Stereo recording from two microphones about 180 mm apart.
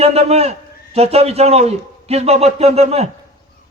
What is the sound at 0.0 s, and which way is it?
A man's voice, 35° right (ahead or behind).